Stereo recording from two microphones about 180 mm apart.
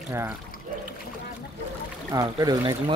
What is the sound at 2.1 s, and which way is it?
Speech, 20° right (ahead or behind).